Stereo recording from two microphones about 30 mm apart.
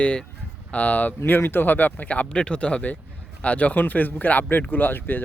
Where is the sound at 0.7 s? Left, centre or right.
Left.